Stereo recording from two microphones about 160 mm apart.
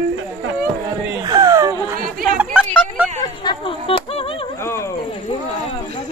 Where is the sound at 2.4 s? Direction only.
5° right (ahead or behind).